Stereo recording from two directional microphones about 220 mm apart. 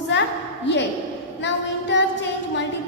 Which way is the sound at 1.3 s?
55° left (ahead or behind).